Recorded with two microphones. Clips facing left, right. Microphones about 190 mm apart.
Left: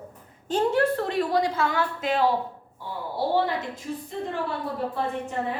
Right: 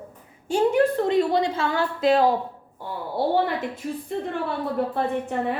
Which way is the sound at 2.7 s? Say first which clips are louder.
Right 4 dB; 55° right (ahead or behind).